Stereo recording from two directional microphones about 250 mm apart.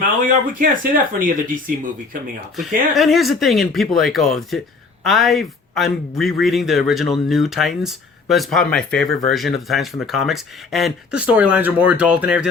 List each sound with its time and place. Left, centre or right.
0.0 s speech: right
2.6 s speech: centre